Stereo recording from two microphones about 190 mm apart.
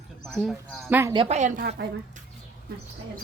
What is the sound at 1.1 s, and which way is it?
Speech, 30° right (ahead or behind).